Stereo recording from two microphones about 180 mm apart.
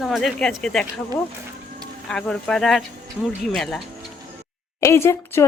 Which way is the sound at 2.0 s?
5° left (ahead or behind).